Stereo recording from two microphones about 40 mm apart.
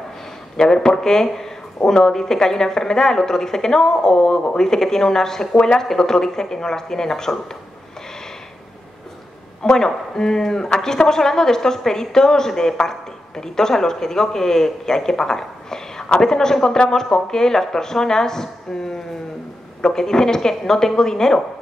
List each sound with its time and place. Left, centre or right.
0.6 s speech: centre
9.6 s speech: centre
16.6 s speech: left